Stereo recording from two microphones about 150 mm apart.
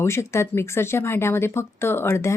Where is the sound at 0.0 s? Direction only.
20° left (ahead or behind).